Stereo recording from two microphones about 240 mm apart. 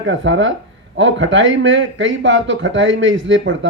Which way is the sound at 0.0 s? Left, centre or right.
Right.